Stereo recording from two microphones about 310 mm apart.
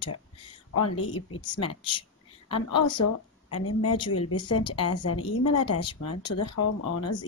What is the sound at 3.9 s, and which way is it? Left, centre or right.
Speech, centre.